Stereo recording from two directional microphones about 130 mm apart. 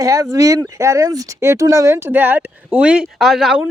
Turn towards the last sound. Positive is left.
turn(degrees=-5)  # may be behind; listen again after turning